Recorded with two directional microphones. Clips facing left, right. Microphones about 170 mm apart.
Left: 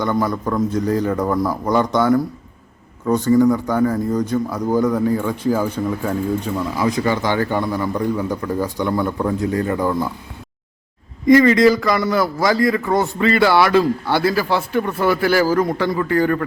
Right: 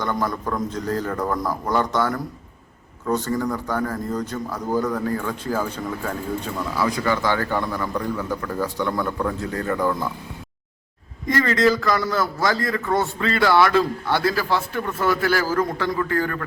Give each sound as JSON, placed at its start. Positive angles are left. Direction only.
{"t": 0.0, "sound": "speech", "side_deg": 10}
{"t": 11.3, "sound": "speech", "side_deg": 10}
{"t": 14.7, "sound": "speech", "side_deg": 25}
{"t": 15.1, "sound": "speech", "side_deg": 10}